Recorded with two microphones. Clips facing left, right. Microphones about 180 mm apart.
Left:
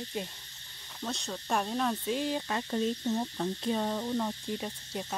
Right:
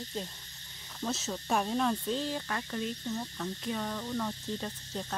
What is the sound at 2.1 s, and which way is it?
Speech, 15° left (ahead or behind).